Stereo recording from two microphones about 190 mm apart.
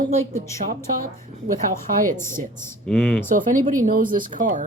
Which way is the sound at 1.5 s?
45° right (ahead or behind).